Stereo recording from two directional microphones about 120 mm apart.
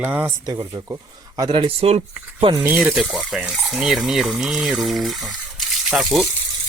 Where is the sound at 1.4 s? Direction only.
45° right (ahead or behind).